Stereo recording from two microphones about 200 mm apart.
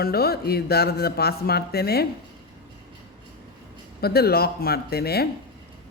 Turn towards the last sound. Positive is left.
turn(degrees=50)  # may be behind; listen again after turning